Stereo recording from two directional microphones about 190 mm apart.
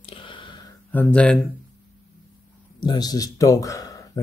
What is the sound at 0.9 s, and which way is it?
Speech, 5° left (ahead or behind).